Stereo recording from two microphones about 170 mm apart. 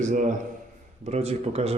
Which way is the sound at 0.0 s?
45° right (ahead or behind).